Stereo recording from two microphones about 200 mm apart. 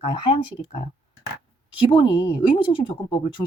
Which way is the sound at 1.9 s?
25° left (ahead or behind).